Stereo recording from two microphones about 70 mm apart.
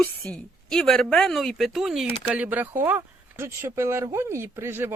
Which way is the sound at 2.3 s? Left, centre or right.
Right.